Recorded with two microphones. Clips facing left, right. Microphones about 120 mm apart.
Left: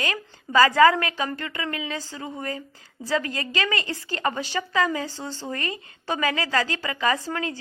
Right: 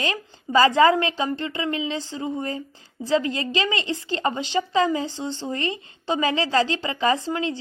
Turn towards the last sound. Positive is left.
turn(degrees=-25)  # may be behind; listen again after turning